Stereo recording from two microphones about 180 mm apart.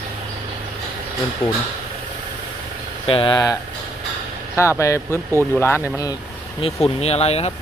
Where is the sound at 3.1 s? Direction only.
30° left (ahead or behind).